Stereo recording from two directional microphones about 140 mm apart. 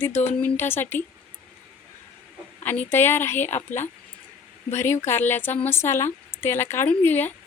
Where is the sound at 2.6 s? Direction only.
15° left (ahead or behind).